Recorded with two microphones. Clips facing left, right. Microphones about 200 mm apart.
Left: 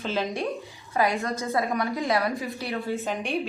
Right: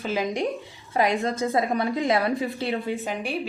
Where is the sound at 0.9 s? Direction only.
20° right (ahead or behind).